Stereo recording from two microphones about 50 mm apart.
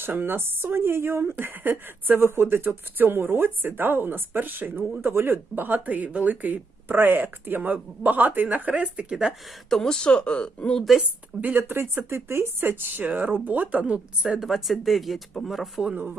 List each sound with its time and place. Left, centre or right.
0.0 s speech: right
2.2 s speech: right
9.6 s speech: centre
11.3 s speech: right
13.1 s speech: right; by 14.4 s centre
14.4 s speech: centre